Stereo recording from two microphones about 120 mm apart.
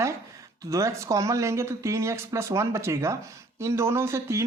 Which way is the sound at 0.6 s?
25° right (ahead or behind).